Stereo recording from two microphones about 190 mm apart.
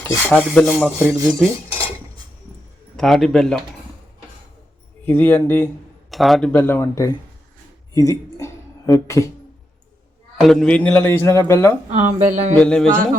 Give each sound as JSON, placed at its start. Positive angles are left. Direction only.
{"t": 0.2, "sound": "speech", "side_deg": 5}
{"t": 0.9, "sound": "speech", "side_deg": -15}
{"t": 2.9, "sound": "speech", "side_deg": 0}
{"t": 5.0, "sound": "a man's voice", "side_deg": 10}
{"t": 6.1, "sound": "a man's voice", "side_deg": 0}
{"t": 10.4, "sound": "a man's voice", "side_deg": 5}
{"t": 11.9, "sound": "speech", "side_deg": -40}
{"t": 12.5, "sound": "speech", "side_deg": 5}